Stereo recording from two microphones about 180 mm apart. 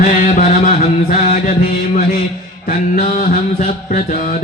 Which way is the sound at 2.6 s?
50° left (ahead or behind).